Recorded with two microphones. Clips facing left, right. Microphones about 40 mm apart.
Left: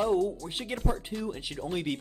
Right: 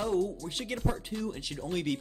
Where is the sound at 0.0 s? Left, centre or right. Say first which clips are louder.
Left 3 dB; centre.